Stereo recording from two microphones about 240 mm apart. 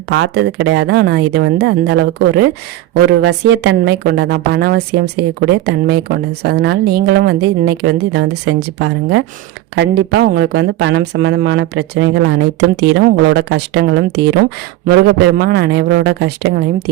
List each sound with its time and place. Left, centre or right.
0.1 s a woman's voice: right